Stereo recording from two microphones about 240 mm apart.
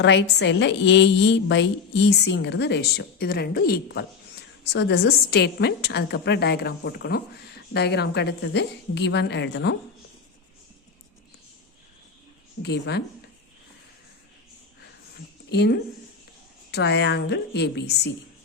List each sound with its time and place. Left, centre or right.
0.0 s a woman's voice: left
12.6 s a woman's voice: left
15.4 s a woman's voice: left